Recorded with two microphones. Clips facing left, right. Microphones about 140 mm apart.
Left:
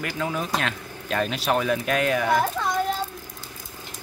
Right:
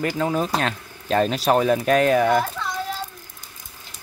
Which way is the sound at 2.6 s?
45° left (ahead or behind).